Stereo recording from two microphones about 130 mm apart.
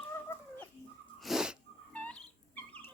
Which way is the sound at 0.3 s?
15° left (ahead or behind).